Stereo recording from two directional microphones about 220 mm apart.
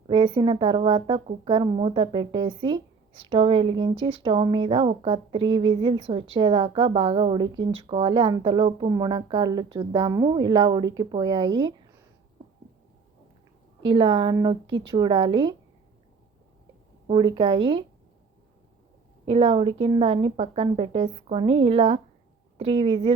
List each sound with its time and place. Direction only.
0.1 s speech: 25° right (ahead or behind)
13.8 s speech: 20° right (ahead or behind)
17.1 s speech: 20° right (ahead or behind)
19.2 s speech: 25° right (ahead or behind)